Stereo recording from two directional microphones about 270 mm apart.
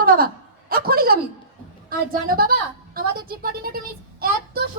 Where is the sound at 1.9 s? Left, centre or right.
Right.